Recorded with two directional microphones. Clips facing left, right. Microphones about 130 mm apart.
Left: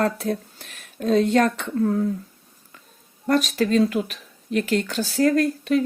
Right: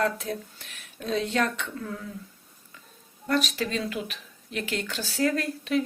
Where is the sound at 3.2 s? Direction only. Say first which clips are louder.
Left 6 dB; 45° left (ahead or behind).